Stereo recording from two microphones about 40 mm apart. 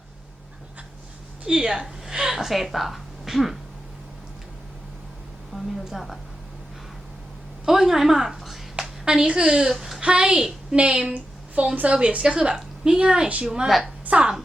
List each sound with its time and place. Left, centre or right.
1.5 s a woman's voice: right; by 3.6 s centre
5.5 s a woman's voice: centre
5.9 s a woman's voice: centre
7.6 s a woman's voice: centre
9.0 s a woman's voice: right
9.6 s speech: centre
10.0 s a woman's voice: right
10.8 s a woman's voice: right
11.9 s a woman's voice: right
13.7 s a woman's voice: centre
14.0 s a sound: right